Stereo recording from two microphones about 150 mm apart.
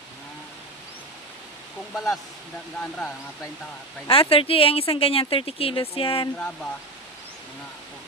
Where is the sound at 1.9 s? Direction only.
Centre (ahead or behind).